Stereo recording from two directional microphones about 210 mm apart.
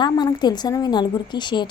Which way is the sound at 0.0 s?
20° left (ahead or behind).